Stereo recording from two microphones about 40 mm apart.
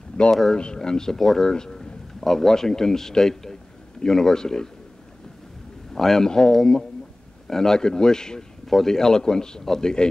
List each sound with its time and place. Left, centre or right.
0.6 s speech: left
1.2 s speech: centre
1.5 s a sound: centre
2.2 s speech: centre
5.9 s speech: centre